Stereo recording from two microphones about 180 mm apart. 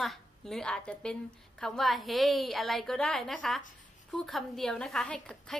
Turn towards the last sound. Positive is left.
turn(degrees=5)  # may be behind; listen again after turning